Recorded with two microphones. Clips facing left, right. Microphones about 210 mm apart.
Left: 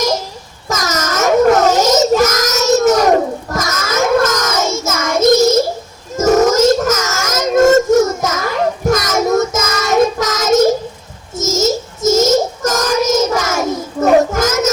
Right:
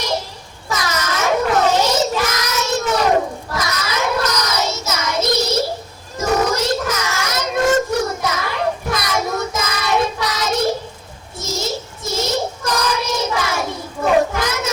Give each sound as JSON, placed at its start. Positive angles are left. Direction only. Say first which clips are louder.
{"t": 0.7, "sound": "child singing", "louder": "left 4 dB", "side_deg": 45}
{"t": 6.1, "sound": "a sound", "louder": "left 8 dB", "side_deg": 45}
{"t": 11.3, "sound": "child singing", "louder": "left 9 dB", "side_deg": 45}